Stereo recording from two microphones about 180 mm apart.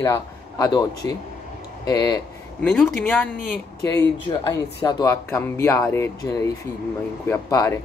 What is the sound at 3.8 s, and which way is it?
Speech, 20° left (ahead or behind).